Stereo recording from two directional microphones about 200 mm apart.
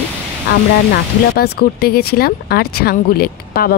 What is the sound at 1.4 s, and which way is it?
Speech, 50° left (ahead or behind).